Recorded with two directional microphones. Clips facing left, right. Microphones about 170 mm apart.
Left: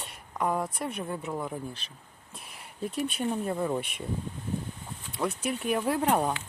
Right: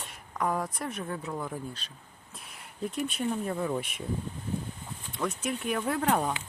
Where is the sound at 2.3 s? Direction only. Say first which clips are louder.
Left 2 dB; 30° left (ahead or behind).